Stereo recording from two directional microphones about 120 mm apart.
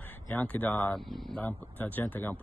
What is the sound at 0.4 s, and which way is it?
Speech, 15° left (ahead or behind).